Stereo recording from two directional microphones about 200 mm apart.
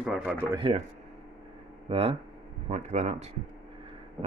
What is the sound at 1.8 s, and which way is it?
Speech, 30° right (ahead or behind).